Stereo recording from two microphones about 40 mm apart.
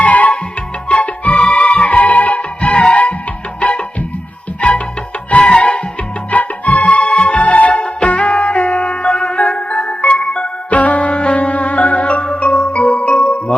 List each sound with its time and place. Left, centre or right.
0.0 s music: left
5.4 s music: left
6.3 s music: left
10.7 s music: left